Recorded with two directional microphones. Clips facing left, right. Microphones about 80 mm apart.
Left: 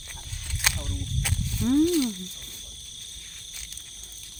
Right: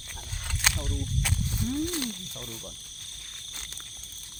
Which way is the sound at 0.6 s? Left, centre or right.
Centre.